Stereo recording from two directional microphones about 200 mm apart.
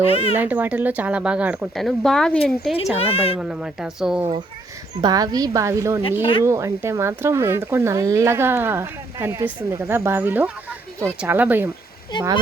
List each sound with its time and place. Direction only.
0.0 s a woman's voice: 30° left (ahead or behind)
0.3 s speech: 10° right (ahead or behind)
3.0 s a woman's voice: 30° left (ahead or behind)
3.3 s speech: 5° right (ahead or behind)
4.9 s speech: 20° right (ahead or behind)
12.1 s a woman's voice: 20° left (ahead or behind)